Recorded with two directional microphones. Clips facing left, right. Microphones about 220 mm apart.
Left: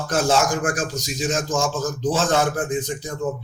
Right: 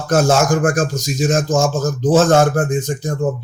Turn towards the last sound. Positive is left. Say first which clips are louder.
# right 6 dB
turn(degrees=-45)  # may be behind; listen again after turning